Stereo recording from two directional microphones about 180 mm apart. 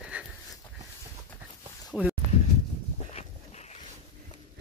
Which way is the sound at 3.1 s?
40° left (ahead or behind).